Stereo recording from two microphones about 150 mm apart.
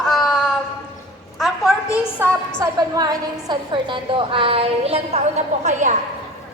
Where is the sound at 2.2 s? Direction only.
15° right (ahead or behind).